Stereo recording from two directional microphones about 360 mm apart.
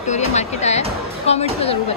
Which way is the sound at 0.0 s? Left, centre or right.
Centre.